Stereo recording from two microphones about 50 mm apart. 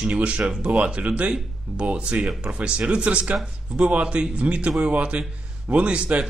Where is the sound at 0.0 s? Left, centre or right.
Right.